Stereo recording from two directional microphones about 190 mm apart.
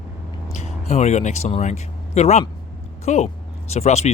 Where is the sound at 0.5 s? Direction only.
35° left (ahead or behind).